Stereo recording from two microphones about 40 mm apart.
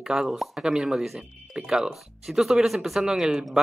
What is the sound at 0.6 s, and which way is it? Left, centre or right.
Speech, centre.